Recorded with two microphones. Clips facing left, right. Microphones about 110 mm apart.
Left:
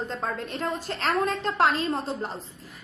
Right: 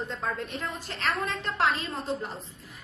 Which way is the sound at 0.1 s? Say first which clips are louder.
Left 2 dB; 40° left (ahead or behind).